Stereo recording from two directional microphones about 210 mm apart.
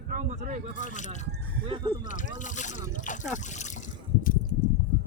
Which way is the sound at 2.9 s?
35° left (ahead or behind).